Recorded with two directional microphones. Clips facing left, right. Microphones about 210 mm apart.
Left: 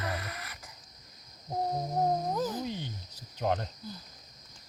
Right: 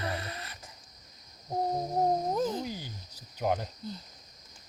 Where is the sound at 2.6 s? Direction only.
5° right (ahead or behind).